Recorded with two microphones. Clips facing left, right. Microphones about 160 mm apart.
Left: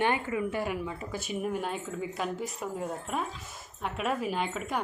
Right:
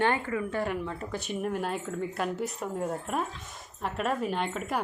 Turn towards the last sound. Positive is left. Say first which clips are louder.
# right 1 dB
turn(degrees=0)  # may be behind; listen again after turning